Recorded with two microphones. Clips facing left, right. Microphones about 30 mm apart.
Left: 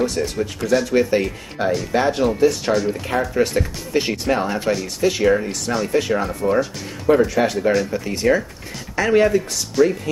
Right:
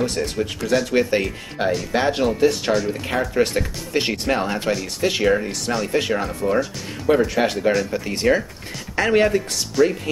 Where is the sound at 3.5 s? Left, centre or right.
Centre.